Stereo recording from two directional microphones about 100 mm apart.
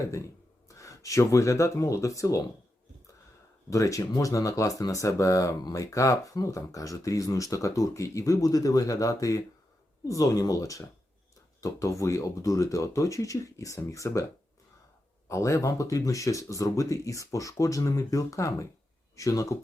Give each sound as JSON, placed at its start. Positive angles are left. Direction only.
{"t": 0.0, "sound": "speech", "side_deg": 30}
{"t": 3.7, "sound": "speech", "side_deg": 35}
{"t": 15.3, "sound": "speech", "side_deg": 30}